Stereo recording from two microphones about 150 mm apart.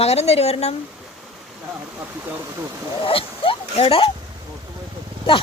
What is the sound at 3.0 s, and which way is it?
Speech, 35° left (ahead or behind).